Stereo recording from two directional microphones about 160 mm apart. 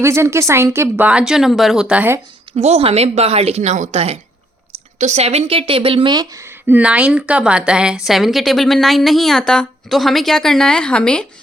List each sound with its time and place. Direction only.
0.0 s speech: 15° right (ahead or behind)
2.6 s a woman's voice: 40° right (ahead or behind); by 11.3 s 5° left (ahead or behind)